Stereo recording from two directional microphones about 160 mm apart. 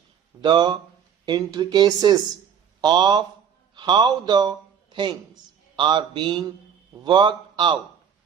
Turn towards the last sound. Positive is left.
turn(degrees=-30)  # may be behind; listen again after turning